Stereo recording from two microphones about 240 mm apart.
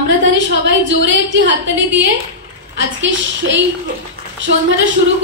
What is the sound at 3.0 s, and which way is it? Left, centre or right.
A woman's voice, right.